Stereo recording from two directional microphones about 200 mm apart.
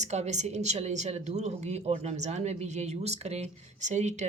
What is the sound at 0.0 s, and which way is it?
Speech, 35° right (ahead or behind).